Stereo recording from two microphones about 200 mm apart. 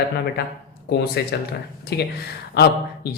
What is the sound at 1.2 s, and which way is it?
Speech, 55° left (ahead or behind).